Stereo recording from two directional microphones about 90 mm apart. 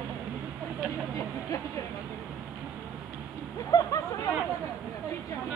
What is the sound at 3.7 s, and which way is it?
Speech, 40° left (ahead or behind).